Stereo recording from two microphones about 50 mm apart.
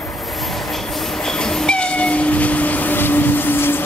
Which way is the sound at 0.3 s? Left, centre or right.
Centre.